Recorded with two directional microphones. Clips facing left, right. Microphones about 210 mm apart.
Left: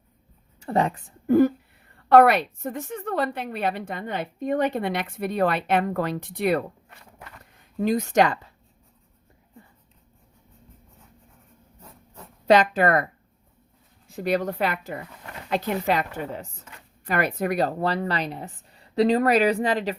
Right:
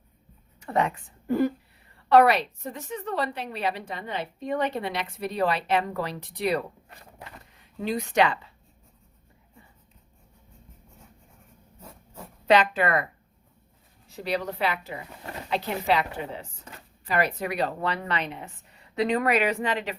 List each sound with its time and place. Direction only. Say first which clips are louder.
0.6 s a woman's voice: left 2 dB; 35° left (ahead or behind)
1.3 s a woman's voice: left 6 dB; 45° left (ahead or behind)
6.9 s a sound: right 1 dB; 30° right (ahead or behind)
7.8 s a woman's voice: left 4 dB; 45° left (ahead or behind)
12.5 s a woman's voice: left 3 dB; 40° left (ahead or behind)
14.2 s a woman's voice: left 4 dB; 50° left (ahead or behind)